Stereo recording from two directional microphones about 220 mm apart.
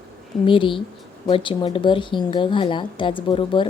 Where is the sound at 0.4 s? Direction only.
25° left (ahead or behind).